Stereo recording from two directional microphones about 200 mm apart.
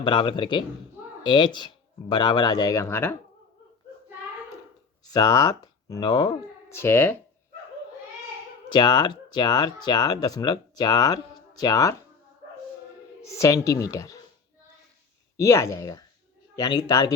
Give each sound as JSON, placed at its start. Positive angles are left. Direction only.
{"t": 0.0, "sound": "speech", "side_deg": 25}
{"t": 5.0, "sound": "speech", "side_deg": 20}
{"t": 8.7, "sound": "speech", "side_deg": 20}
{"t": 13.2, "sound": "a woman's voice", "side_deg": 15}
{"t": 15.4, "sound": "a woman's voice", "side_deg": 15}